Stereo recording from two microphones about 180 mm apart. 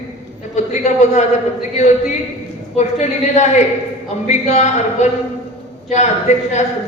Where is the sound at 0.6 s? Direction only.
40° left (ahead or behind).